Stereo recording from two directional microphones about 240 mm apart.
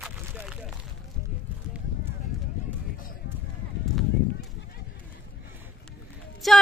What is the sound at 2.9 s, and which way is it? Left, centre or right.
Clip-clop, left.